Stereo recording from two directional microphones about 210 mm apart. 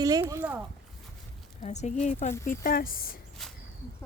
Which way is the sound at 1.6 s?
35° left (ahead or behind).